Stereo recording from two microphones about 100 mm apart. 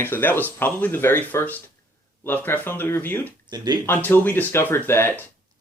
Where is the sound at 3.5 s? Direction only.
45° right (ahead or behind).